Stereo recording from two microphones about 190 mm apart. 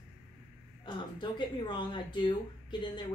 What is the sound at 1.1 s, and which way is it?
Speech, 25° left (ahead or behind).